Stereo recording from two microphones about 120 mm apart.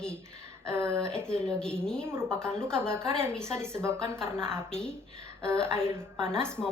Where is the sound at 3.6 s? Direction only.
20° right (ahead or behind).